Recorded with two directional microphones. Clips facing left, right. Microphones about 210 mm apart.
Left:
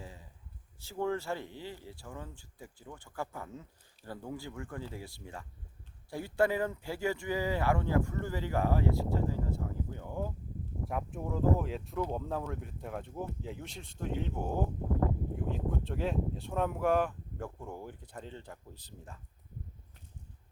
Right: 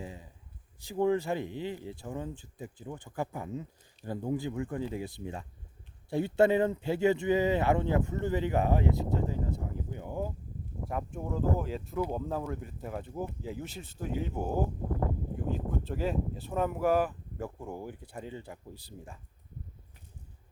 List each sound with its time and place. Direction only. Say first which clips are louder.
0.0 s a sound: right 6 dB; 20° right (ahead or behind)
0.8 s speech: right 6 dB; 15° right (ahead or behind)
10.8 s speech: right 2 dB; centre (ahead or behind)